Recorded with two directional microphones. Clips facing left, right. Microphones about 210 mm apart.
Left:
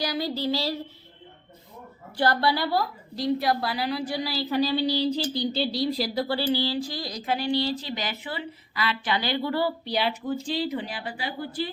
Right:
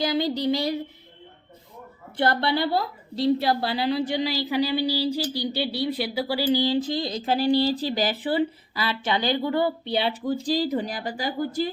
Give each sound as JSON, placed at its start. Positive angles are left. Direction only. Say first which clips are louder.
{"t": 0.0, "sound": "a woman's voice", "louder": "right 4 dB", "side_deg": -25}
{"t": 2.1, "sound": "a woman's voice", "louder": "right 1 dB", "side_deg": -20}
{"t": 6.0, "sound": "a sound", "louder": "right 1 dB", "side_deg": -10}